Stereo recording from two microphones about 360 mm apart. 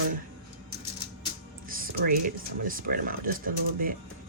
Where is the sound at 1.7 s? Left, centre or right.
Right.